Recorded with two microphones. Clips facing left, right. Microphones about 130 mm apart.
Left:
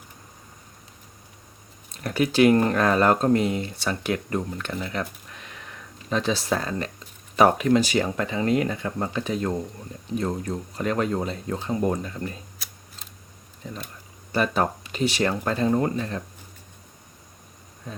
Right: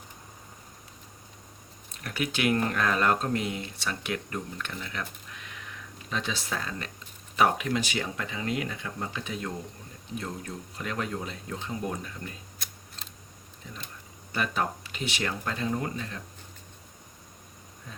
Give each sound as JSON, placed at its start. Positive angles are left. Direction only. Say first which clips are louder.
{"t": 2.0, "sound": "speech", "louder": "left 9 dB", "side_deg": 35}
{"t": 6.1, "sound": "speech", "louder": "left 9 dB", "side_deg": 35}
{"t": 13.6, "sound": "speech", "louder": "left 7 dB", "side_deg": 40}
{"t": 17.9, "sound": "a sound", "louder": "left 9 dB", "side_deg": 35}